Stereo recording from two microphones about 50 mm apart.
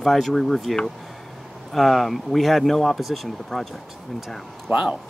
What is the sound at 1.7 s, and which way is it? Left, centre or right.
Speech, centre.